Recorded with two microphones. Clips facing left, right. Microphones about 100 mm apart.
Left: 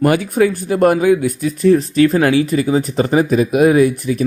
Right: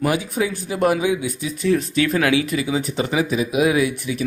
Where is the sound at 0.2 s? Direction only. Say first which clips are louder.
Left 8 dB; 50° left (ahead or behind).